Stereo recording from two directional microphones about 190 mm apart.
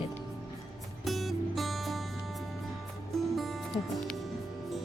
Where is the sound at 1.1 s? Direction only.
Centre (ahead or behind).